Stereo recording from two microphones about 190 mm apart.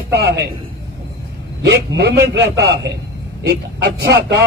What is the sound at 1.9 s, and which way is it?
A man's voice, 60° right (ahead or behind).